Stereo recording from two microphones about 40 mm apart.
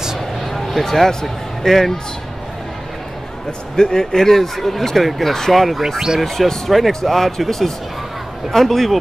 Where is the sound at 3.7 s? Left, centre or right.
Centre.